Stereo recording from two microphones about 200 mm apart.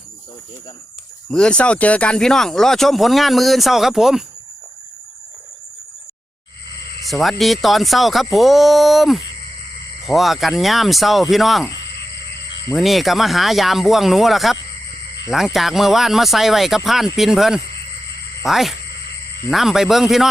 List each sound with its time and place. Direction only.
1.3 s speech: 5° left (ahead or behind)
7.1 s speech: centre (ahead or behind)
11.9 s a sound: 55° left (ahead or behind)
12.7 s speech: centre (ahead or behind)